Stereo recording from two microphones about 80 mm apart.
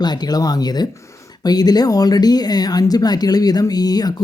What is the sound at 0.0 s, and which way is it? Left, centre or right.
Speech, left.